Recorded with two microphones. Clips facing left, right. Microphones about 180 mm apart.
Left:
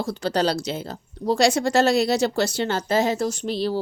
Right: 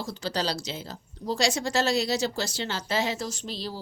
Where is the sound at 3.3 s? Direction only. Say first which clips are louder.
Left 10 dB; 60° left (ahead or behind).